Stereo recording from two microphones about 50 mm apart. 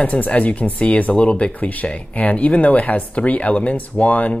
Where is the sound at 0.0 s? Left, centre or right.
Left.